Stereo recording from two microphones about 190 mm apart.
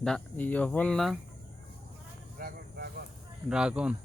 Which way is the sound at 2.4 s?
50° right (ahead or behind).